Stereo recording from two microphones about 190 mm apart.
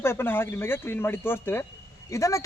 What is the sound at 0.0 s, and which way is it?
A man's voice, 10° left (ahead or behind).